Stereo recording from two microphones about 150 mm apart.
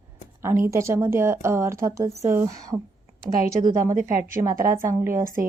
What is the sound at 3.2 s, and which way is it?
Speech, 70° right (ahead or behind).